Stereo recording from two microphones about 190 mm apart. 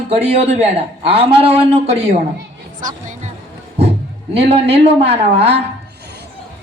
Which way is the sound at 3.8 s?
30° right (ahead or behind).